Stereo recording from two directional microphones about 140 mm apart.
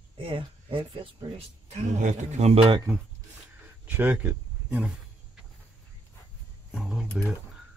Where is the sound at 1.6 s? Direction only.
50° right (ahead or behind).